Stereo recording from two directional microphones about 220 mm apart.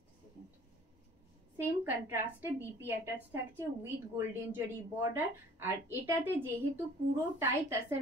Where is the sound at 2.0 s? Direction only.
10° right (ahead or behind).